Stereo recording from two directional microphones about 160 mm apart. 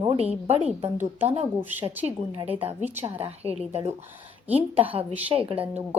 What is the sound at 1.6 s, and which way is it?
Speech, 10° right (ahead or behind).